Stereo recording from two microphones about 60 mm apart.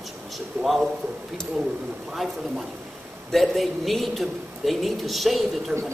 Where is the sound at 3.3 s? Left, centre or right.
Centre.